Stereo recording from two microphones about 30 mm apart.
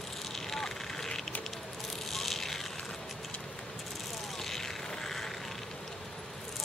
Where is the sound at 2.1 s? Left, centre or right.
Centre.